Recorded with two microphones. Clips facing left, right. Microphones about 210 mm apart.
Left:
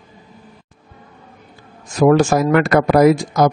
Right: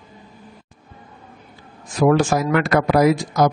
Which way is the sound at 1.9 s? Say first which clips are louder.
Left 4 dB; 45° left (ahead or behind).